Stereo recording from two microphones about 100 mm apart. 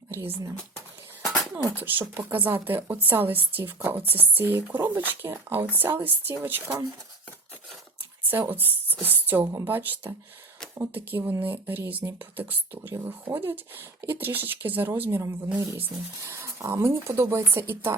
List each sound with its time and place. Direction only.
0.1 s speech: 25° right (ahead or behind)
1.7 s speech: 20° right (ahead or behind)
8.3 s speech: 20° right (ahead or behind)
15.5 s speech: 30° right (ahead or behind)